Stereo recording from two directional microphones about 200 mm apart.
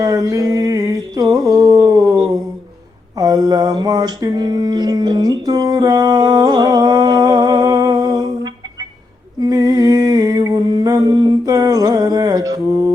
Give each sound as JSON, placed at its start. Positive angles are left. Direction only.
{"t": 0.0, "sound": "mantra", "side_deg": -15}
{"t": 3.2, "sound": "a sound", "side_deg": -20}
{"t": 9.4, "sound": "humming", "side_deg": -20}